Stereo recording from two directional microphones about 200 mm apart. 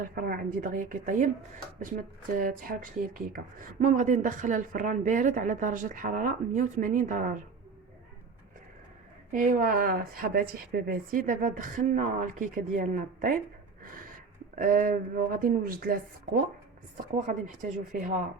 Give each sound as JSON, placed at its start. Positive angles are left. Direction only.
{"t": 0.2, "sound": "speech", "side_deg": -45}
{"t": 9.3, "sound": "a woman's voice", "side_deg": -40}
{"t": 13.8, "sound": "gasp", "side_deg": -45}
{"t": 14.5, "sound": "a woman's voice", "side_deg": -40}